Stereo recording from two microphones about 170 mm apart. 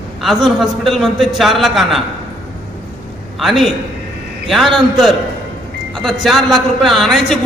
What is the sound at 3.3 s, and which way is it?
A man's voice, centre (ahead or behind).